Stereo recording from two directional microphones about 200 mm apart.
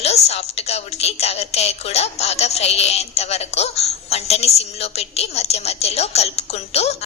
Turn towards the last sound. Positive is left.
turn(degrees=30)  # may be behind; listen again after turning